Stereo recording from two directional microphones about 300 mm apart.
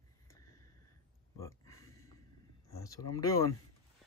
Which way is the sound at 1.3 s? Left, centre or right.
Centre.